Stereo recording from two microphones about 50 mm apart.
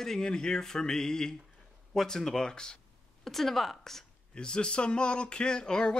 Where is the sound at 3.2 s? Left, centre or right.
Centre.